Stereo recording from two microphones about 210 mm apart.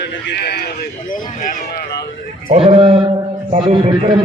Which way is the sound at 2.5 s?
25° right (ahead or behind).